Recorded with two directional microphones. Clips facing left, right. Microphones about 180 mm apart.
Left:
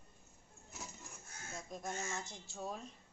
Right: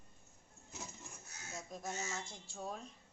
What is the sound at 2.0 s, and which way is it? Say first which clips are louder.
Speech: left 1 dB; centre (ahead or behind).